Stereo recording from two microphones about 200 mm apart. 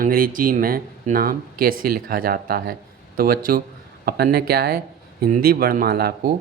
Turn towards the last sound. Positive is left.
turn(degrees=-50)  # may be behind; listen again after turning